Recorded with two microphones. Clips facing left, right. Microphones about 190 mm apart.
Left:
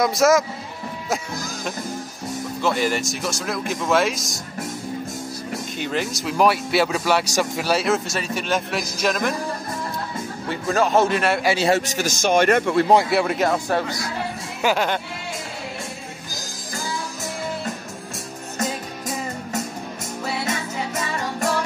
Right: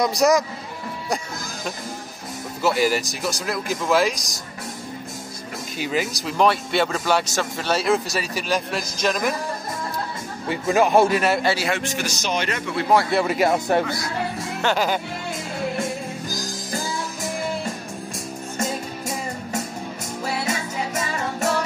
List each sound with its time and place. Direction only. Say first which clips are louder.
0.0 s speech: left 1 dB; centre (ahead or behind)
2.6 s speech: right 2 dB; 5° right (ahead or behind)
5.8 s speech: right 2 dB; 5° right (ahead or behind)
10.5 s a man's voice: right 2 dB; 15° right (ahead or behind)
11.1 s speech: right 1 dB; 5° right (ahead or behind)
11.7 s a man's voice: left 4 dB; 40° left (ahead or behind)
13.1 s speech: even; centre (ahead or behind)
13.5 s a man's voice: right 2 dB; 15° right (ahead or behind)
14.6 s speech: left 1 dB; 5° left (ahead or behind)
20.4 s music: even; 10° right (ahead or behind)